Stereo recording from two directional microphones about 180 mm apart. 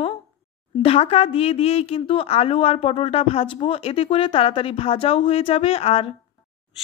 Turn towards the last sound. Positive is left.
turn(degrees=35)  # may be behind; listen again after turning